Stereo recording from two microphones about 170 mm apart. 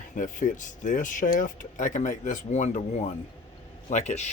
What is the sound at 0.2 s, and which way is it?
Speech, 50° left (ahead or behind).